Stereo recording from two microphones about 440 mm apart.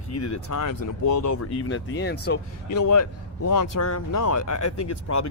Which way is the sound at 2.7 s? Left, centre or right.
Left.